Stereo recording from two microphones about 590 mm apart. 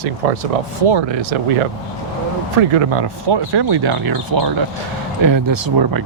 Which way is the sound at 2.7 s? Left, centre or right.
Right.